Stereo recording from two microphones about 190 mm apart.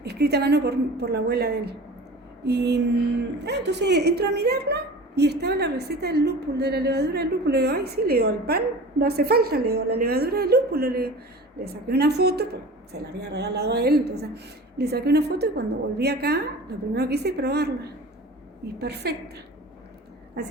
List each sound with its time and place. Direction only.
0.0 s a woman's voice: 60° right (ahead or behind)